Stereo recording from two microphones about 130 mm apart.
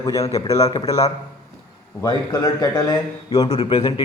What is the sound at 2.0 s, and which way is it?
A man's voice, 35° left (ahead or behind).